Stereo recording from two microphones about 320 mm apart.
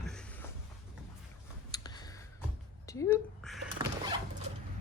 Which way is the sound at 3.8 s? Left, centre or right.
Centre.